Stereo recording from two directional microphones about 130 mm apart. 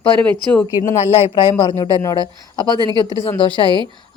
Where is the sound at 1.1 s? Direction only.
40° left (ahead or behind).